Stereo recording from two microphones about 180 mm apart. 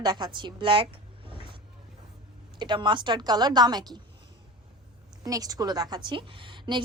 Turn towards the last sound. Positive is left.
turn(degrees=-25)  # may be behind; listen again after turning